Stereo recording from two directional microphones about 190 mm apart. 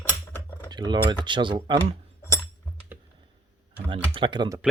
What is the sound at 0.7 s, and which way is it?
Speech, 20° right (ahead or behind).